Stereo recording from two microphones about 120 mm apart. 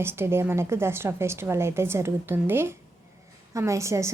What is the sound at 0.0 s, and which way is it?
A woman's voice, 20° right (ahead or behind).